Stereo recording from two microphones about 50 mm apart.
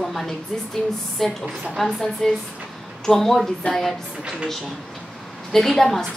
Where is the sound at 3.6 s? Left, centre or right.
Left.